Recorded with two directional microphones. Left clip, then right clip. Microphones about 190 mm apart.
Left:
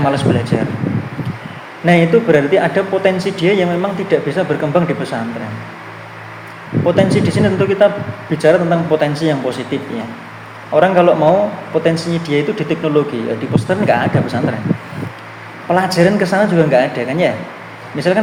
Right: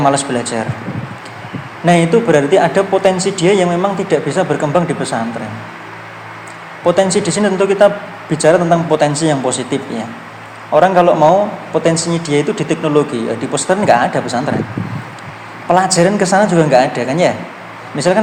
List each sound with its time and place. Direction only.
0.0 s speech: 25° right (ahead or behind)
1.8 s speech: 25° right (ahead or behind)
6.8 s speech: 25° right (ahead or behind)
15.7 s speech: 25° right (ahead or behind)